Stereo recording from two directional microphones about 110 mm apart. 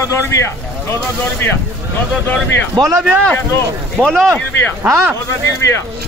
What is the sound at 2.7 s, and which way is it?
Speech, 30° right (ahead or behind).